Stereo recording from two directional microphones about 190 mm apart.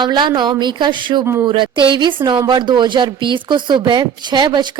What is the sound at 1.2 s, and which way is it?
Speech, 15° right (ahead or behind).